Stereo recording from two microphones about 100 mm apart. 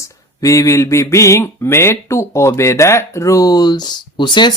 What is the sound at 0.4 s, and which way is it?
Speech, 35° left (ahead or behind).